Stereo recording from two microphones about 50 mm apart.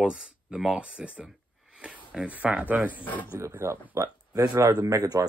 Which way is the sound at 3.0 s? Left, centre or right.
Left.